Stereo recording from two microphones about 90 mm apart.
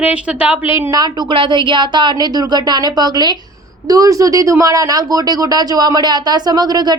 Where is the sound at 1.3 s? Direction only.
65° right (ahead or behind).